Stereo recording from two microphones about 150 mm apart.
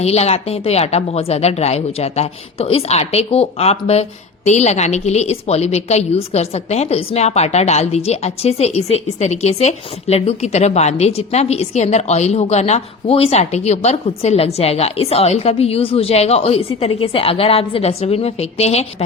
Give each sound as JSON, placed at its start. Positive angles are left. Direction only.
{"t": 0.0, "sound": "a woman's voice", "side_deg": 45}